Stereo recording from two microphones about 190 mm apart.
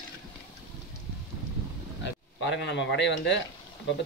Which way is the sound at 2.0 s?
65° left (ahead or behind).